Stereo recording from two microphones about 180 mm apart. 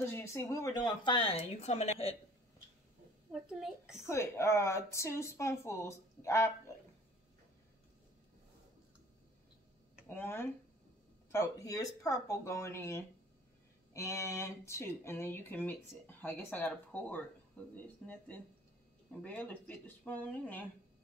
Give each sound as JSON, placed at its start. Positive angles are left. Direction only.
{"t": 0.1, "sound": "speech", "side_deg": 15}
{"t": 3.3, "sound": "a child's voice", "side_deg": -5}
{"t": 4.0, "sound": "a woman's voice", "side_deg": 15}
{"t": 10.0, "sound": "a woman's voice", "side_deg": 10}
{"t": 19.2, "sound": "a woman's voice", "side_deg": 10}